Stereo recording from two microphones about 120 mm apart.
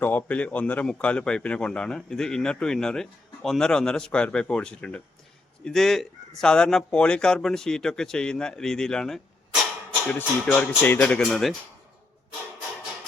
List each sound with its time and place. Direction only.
0.0 s a man's voice: 15° left (ahead or behind)
11.2 s speech: centre (ahead or behind)